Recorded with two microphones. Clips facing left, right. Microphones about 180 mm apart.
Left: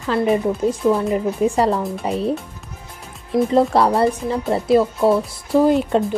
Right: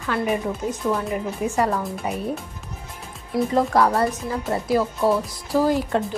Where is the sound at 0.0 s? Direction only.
30° left (ahead or behind).